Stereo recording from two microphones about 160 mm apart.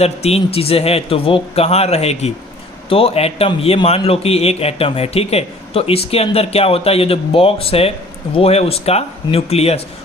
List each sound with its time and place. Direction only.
0.0 s a man's voice: 40° left (ahead or behind)